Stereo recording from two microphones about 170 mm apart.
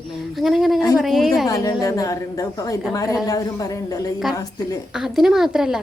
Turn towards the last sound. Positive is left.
turn(degrees=-5)  # may be behind; listen again after turning